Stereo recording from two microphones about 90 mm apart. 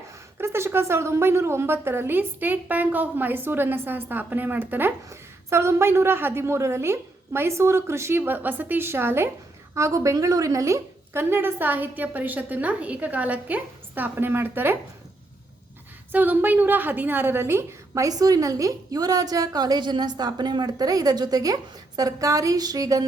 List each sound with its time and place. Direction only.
0.3 s a woman's voice: 30° right (ahead or behind)
16.1 s a woman's voice: 20° right (ahead or behind); by 23.0 s 40° right (ahead or behind)